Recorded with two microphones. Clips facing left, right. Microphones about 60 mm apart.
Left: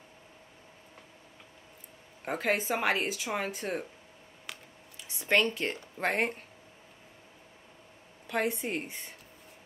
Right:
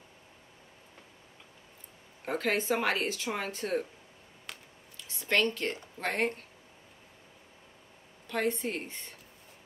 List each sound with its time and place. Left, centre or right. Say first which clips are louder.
2.2 s speech: even; centre
4.5 s scissors: left 1 dB; centre
5.0 s speech: left 1 dB; centre
8.3 s speech: even; centre